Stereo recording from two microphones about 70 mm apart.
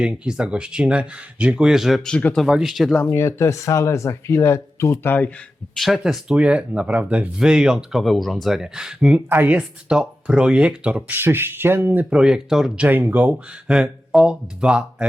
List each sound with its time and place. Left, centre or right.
0.0 s speech: centre
3.1 s speech: left
5.7 s speech: centre
9.3 s speech: right
9.6 s speech: centre
11.1 s speech: right
12.1 s speech: centre
12.7 s speech: right
13.7 s speech: centre